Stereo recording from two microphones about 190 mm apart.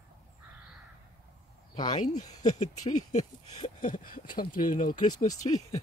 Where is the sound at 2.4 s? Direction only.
35° left (ahead or behind).